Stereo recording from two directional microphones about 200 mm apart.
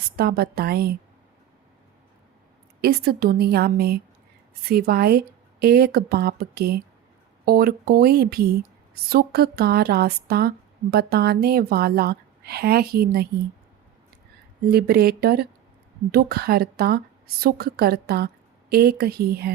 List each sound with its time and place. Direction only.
0.2 s a woman's voice: 50° right (ahead or behind)
2.8 s a woman's voice: 50° right (ahead or behind)
14.7 s a woman's voice: 50° right (ahead or behind)